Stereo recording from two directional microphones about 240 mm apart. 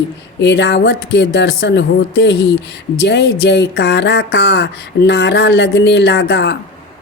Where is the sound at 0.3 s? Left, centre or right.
Left.